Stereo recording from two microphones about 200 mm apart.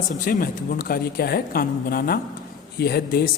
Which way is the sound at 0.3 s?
45° left (ahead or behind).